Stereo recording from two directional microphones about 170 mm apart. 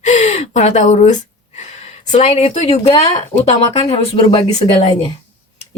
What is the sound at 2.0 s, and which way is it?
Speech, 40° left (ahead or behind).